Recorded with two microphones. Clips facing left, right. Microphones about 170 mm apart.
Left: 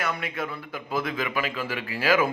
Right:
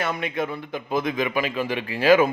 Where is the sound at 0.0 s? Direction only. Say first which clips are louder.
Right 4 dB; 25° right (ahead or behind).